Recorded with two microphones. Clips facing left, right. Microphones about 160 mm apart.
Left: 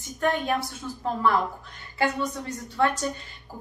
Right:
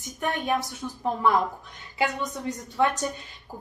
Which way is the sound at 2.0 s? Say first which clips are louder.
Left 1 dB; 15° right (ahead or behind).